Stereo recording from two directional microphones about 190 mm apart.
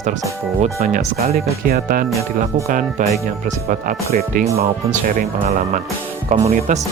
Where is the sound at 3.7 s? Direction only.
45° right (ahead or behind).